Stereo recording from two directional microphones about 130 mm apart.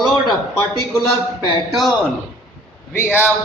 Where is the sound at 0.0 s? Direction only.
Centre (ahead or behind).